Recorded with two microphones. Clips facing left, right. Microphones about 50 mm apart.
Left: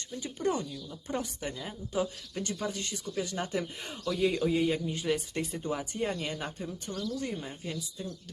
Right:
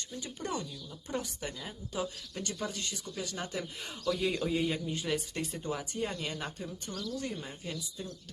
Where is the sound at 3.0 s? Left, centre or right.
Centre.